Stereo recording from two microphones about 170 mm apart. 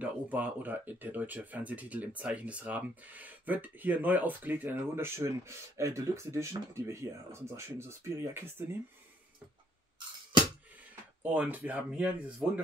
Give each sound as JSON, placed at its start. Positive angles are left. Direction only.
{"t": 0.0, "sound": "speech", "side_deg": -10}
{"t": 11.3, "sound": "speech", "side_deg": -10}